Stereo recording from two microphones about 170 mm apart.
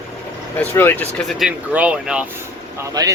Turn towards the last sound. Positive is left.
turn(degrees=-20)  # may be behind; listen again after turning